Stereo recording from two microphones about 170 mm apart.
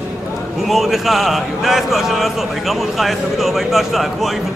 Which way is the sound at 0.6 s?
Centre (ahead or behind).